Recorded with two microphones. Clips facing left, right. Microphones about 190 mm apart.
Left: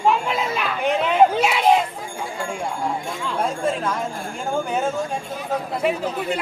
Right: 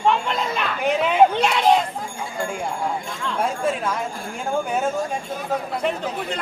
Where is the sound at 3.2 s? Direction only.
Centre (ahead or behind).